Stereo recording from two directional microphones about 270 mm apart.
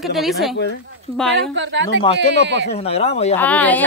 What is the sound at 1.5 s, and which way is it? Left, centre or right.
Speech, right.